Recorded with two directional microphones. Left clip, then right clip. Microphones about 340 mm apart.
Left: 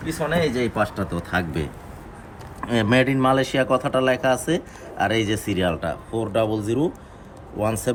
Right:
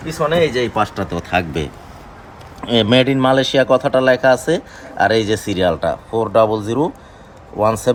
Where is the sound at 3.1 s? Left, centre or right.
Right.